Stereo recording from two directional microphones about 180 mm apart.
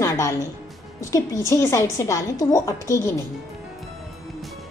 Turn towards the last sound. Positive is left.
turn(degrees=15)  # may be behind; listen again after turning